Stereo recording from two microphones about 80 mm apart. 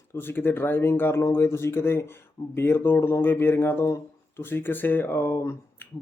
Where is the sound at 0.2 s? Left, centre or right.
Left.